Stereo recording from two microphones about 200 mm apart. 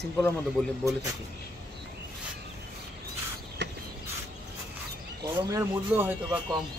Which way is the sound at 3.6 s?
60° right (ahead or behind).